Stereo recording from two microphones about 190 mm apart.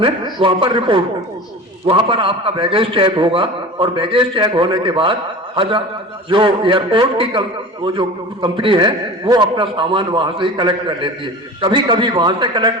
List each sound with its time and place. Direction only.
0.0 s a man's voice: 25° right (ahead or behind)
6.3 s a man's voice: 25° right (ahead or behind)